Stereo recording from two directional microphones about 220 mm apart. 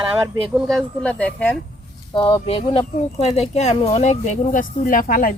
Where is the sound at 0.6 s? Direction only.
5° left (ahead or behind).